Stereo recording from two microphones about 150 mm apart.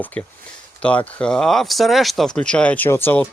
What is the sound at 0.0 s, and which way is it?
Speech, 10° left (ahead or behind).